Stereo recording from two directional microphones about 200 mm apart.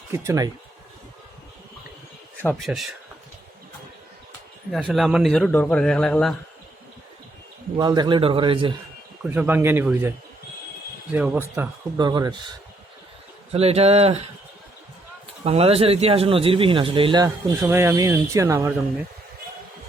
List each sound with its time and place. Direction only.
0.1 s speech: 15° right (ahead or behind)
2.4 s a man's voice: 5° left (ahead or behind)
4.7 s a man's voice: centre (ahead or behind)
7.8 s speech: 20° right (ahead or behind)
9.3 s speech: 10° right (ahead or behind)
11.1 s speech: 5° right (ahead or behind)
11.9 s speech: 20° right (ahead or behind)
13.5 s speech: 30° right (ahead or behind)
15.4 s speech: 30° right (ahead or behind)
17.2 s speech: 10° right (ahead or behind)